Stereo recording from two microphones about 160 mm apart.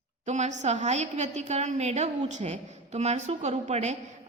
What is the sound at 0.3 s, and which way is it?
A woman's voice, 45° right (ahead or behind).